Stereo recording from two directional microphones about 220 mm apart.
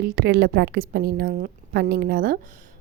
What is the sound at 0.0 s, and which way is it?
A woman's voice, 45° right (ahead or behind).